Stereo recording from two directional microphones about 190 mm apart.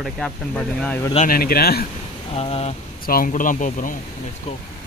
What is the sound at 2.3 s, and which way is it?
Speech, 30° left (ahead or behind).